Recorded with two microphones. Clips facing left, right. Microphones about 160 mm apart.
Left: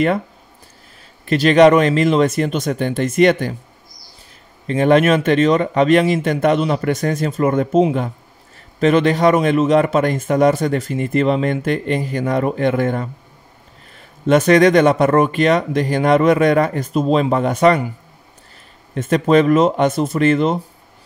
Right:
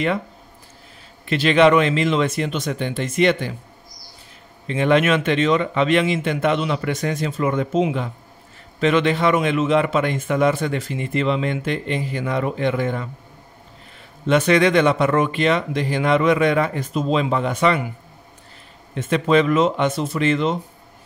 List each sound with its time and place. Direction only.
1.2 s a man's voice: 45° left (ahead or behind)
4.6 s a man's voice: 40° left (ahead or behind)
14.2 s a man's voice: 45° left (ahead or behind)
18.9 s a man's voice: 45° left (ahead or behind)